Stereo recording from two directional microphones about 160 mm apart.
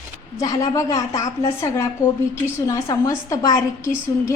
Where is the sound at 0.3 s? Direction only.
20° left (ahead or behind).